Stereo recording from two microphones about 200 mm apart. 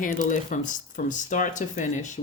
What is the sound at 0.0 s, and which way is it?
Speech, 40° left (ahead or behind).